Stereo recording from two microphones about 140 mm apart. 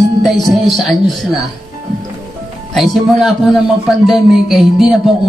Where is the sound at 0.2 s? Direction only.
Centre (ahead or behind).